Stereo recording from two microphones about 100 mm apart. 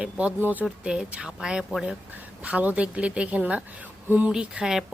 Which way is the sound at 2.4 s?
15° right (ahead or behind).